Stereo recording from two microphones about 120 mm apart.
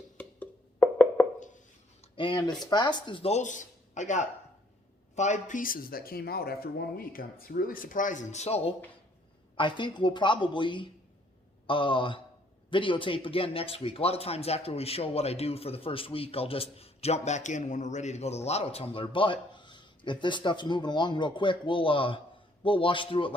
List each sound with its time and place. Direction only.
0.2 s wood block: 10° left (ahead or behind)
1.4 s a sound: 90° left
2.1 s speech: 40° left (ahead or behind)
3.3 s a man's voice: 90° left
7.9 s speech: 90° left; by 8.7 s 60° left (ahead or behind)
9.6 s speech: 40° left (ahead or behind)